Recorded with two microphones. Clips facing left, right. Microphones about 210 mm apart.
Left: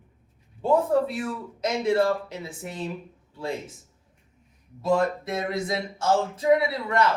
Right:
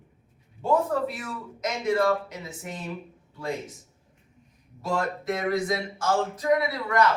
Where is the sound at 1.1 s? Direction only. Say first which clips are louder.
Left 6 dB; 30° left (ahead or behind).